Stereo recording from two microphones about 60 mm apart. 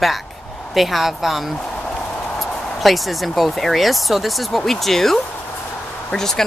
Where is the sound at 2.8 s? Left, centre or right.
Centre.